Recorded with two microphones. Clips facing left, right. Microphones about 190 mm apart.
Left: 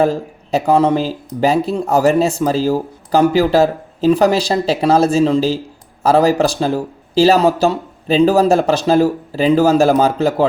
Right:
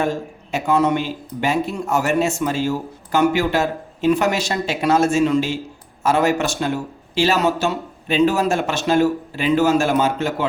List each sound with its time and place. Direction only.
0.0 s speech: 35° left (ahead or behind)